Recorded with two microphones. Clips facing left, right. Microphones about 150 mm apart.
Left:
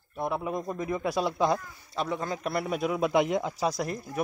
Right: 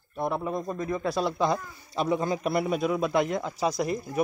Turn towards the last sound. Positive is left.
turn(degrees=-5)  # may be behind; listen again after turning